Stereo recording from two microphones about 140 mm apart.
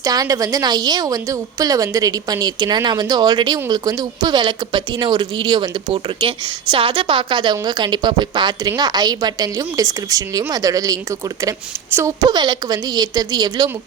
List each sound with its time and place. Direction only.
0.0 s a woman's voice: 25° right (ahead or behind)
12.2 s a woman's voice: 30° right (ahead or behind)